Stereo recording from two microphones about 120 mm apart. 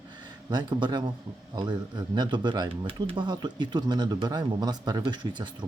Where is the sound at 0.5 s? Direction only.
40° right (ahead or behind).